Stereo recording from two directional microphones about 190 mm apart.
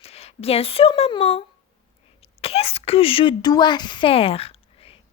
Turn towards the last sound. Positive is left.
turn(degrees=30)  # may be behind; listen again after turning